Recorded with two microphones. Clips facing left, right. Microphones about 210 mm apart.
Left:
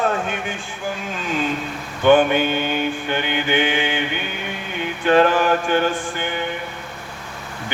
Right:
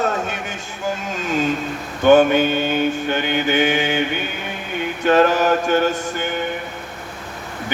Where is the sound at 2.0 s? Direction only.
40° right (ahead or behind).